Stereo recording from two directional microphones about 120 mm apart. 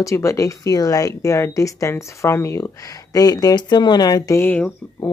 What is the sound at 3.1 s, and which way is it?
Speech, 35° left (ahead or behind).